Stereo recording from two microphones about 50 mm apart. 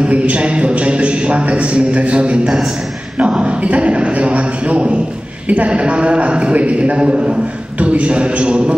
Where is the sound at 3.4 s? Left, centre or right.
Right.